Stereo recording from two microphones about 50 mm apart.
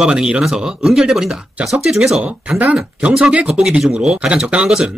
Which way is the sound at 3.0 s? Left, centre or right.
Centre.